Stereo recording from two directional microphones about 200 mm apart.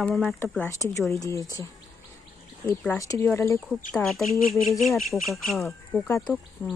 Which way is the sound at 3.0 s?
15° left (ahead or behind).